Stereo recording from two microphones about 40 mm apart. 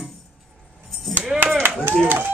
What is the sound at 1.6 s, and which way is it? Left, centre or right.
Chop, right.